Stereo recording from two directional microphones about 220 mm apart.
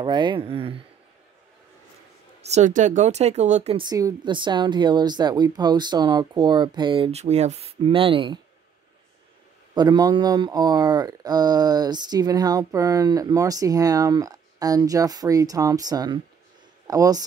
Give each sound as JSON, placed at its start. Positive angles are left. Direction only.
{"t": 0.0, "sound": "a woman's voice", "side_deg": -20}
{"t": 2.4, "sound": "speech", "side_deg": -30}
{"t": 3.9, "sound": "a woman's voice", "side_deg": -20}
{"t": 9.8, "sound": "speech", "side_deg": -15}